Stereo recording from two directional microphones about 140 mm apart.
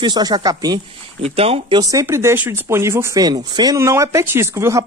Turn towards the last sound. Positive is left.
turn(degrees=-20)  # may be behind; listen again after turning